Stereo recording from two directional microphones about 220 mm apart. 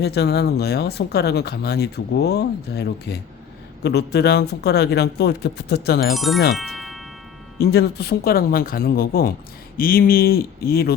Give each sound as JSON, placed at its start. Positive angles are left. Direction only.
{"t": 0.0, "sound": "speech", "side_deg": 50}
{"t": 6.1, "sound": "speech", "side_deg": 0}
{"t": 7.6, "sound": "speech", "side_deg": 45}